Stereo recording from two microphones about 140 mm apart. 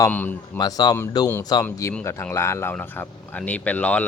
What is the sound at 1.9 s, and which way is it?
Speech, 15° left (ahead or behind).